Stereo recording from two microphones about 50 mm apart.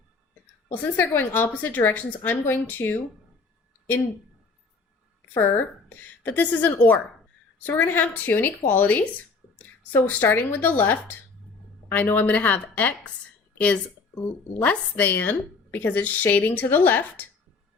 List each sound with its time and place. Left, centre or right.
0.7 s a woman's voice: left
5.3 s a woman's voice: left
15.0 s a woman's voice: left